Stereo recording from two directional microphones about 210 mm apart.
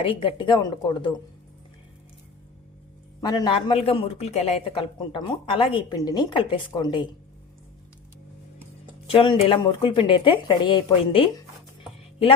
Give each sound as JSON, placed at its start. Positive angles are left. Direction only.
{"t": 0.0, "sound": "a man's voice", "side_deg": 25}
{"t": 3.2, "sound": "a man's voice", "side_deg": 20}
{"t": 9.0, "sound": "a man's voice", "side_deg": 25}